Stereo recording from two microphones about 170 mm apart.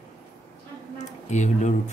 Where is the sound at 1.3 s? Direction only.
45° left (ahead or behind).